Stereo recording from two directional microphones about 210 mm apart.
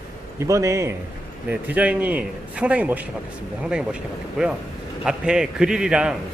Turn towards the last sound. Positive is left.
turn(degrees=-5)  # may be behind; listen again after turning